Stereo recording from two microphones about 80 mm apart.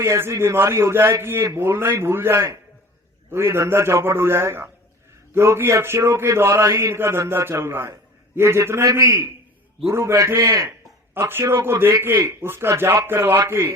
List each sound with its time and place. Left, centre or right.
0.0 s a man's voice: right
10.7 s a sound: right
11.6 s a man's voice: right